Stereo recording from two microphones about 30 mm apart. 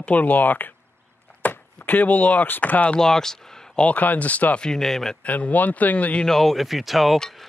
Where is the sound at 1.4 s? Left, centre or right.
Left.